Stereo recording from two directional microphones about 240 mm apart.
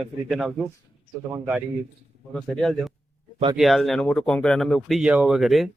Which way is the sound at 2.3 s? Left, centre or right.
Centre.